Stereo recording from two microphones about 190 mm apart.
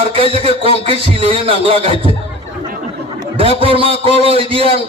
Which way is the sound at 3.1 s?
30° right (ahead or behind).